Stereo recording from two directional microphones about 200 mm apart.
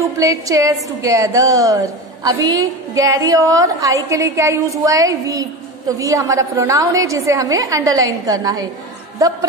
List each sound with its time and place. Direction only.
0.0 s a woman's voice: 15° right (ahead or behind)